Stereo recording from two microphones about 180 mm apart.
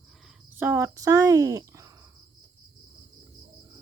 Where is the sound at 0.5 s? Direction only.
10° right (ahead or behind).